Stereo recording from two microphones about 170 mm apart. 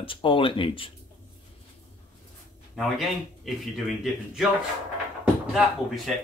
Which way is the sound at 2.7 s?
Centre (ahead or behind).